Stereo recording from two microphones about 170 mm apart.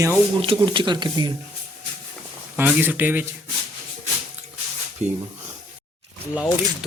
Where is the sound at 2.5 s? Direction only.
10° right (ahead or behind).